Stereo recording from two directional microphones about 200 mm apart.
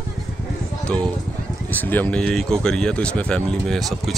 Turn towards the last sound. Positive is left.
turn(degrees=5)  # may be behind; listen again after turning